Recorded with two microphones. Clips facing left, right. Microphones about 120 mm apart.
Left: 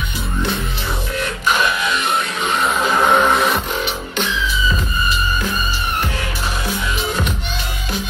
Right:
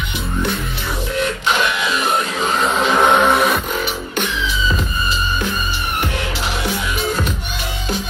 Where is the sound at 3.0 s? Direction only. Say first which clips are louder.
Right 1 dB; 15° right (ahead or behind).